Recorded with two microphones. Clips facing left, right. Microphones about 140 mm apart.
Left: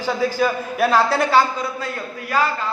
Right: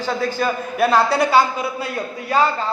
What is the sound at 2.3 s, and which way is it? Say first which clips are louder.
Speech: right 3 dB; 25° right (ahead or behind).